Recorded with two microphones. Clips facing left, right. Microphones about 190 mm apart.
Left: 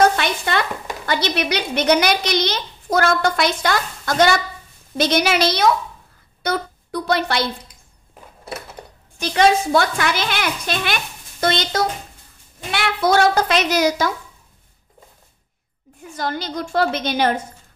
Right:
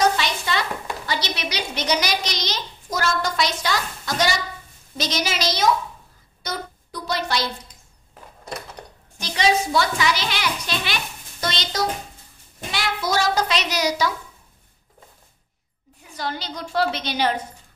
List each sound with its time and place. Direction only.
0.0 s chopping: 55° left (ahead or behind)
1.0 s a woman's voice: 55° left (ahead or behind)
9.2 s a woman's voice: 55° left (ahead or behind)
16.2 s a woman's voice: 50° left (ahead or behind)